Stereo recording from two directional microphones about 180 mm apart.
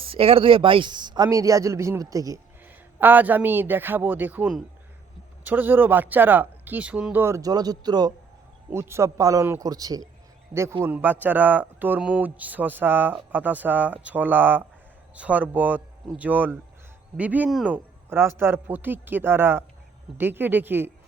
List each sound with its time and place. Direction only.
0.0 s speech: 30° right (ahead or behind); by 20.9 s 10° right (ahead or behind)